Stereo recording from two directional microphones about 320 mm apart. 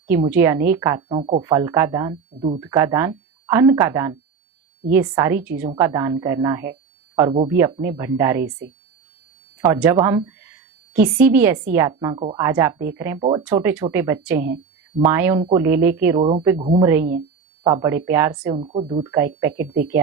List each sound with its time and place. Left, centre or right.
0.1 s speech: centre
9.6 s a woman's voice: centre
18.5 s speech: centre
19.5 s speech: right